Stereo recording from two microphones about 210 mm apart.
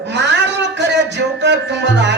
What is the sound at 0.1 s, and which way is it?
Music, 55° right (ahead or behind).